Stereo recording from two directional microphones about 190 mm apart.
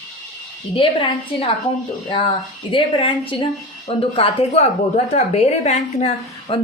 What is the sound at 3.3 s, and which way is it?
A woman's voice, 25° left (ahead or behind).